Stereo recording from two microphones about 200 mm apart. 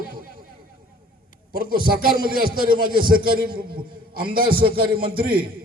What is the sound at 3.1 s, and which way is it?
A man's voice, 45° right (ahead or behind).